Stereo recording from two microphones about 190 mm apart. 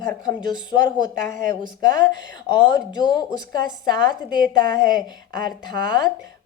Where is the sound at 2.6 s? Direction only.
20° left (ahead or behind).